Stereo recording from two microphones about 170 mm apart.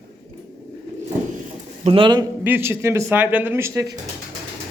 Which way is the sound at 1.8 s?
30° right (ahead or behind).